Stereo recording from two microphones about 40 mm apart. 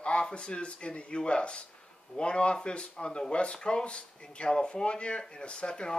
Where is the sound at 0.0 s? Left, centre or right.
Left.